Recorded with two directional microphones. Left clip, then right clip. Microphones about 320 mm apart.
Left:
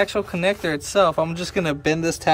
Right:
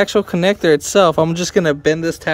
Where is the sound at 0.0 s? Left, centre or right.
Right.